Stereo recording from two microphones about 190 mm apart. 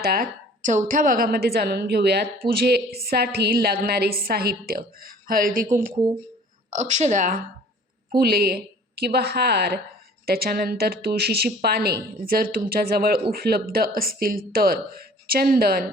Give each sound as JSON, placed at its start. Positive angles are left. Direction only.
{"t": 0.0, "sound": "a woman's voice", "side_deg": -50}
{"t": 8.1, "sound": "a woman's voice", "side_deg": -55}